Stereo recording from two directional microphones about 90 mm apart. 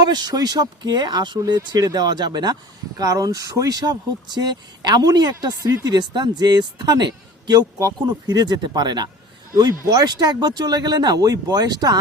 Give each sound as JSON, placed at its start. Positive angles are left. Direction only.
{"t": 0.0, "sound": "speech", "side_deg": -50}